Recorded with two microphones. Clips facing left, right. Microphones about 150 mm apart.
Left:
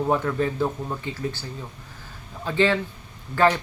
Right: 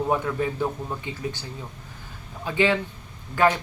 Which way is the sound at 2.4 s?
15° right (ahead or behind).